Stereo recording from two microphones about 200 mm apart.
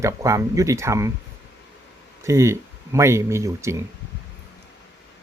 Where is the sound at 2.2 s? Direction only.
15° right (ahead or behind).